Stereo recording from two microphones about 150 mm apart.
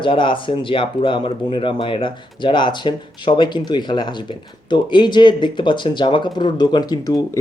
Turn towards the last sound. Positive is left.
turn(degrees=25)  # may be behind; listen again after turning